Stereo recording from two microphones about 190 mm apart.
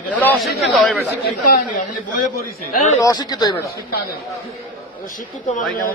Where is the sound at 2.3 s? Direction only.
50° left (ahead or behind).